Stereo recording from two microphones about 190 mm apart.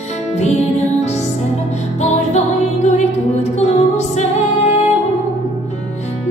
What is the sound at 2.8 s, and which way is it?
Music, 35° left (ahead or behind).